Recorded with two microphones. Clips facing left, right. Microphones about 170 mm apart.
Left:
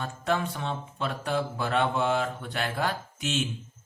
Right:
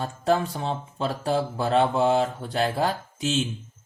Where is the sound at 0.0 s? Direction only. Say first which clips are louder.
Right 5 dB; 35° right (ahead or behind).